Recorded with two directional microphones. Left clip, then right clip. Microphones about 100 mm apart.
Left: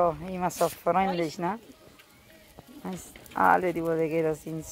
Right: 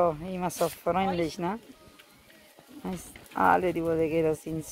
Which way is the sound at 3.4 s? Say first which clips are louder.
Left 1 dB; 50° right (ahead or behind).